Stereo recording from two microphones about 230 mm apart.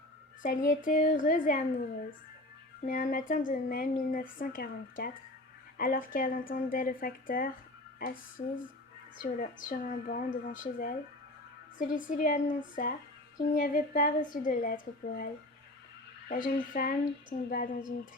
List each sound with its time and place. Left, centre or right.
0.4 s a woman's voice: left
2.8 s a woman's voice: left
16.3 s a woman's voice: left